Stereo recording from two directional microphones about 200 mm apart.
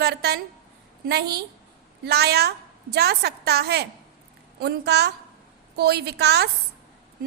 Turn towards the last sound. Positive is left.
turn(degrees=-55)  # may be behind; listen again after turning